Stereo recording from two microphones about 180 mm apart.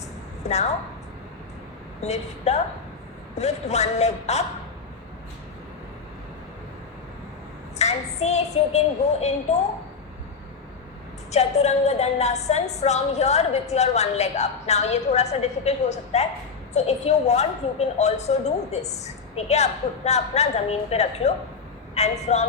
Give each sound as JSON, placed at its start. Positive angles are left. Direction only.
{"t": 0.4, "sound": "a woman's voice", "side_deg": 40}
{"t": 2.0, "sound": "a woman's voice", "side_deg": 35}
{"t": 7.8, "sound": "child singing", "side_deg": 35}
{"t": 11.3, "sound": "a woman's voice", "side_deg": 35}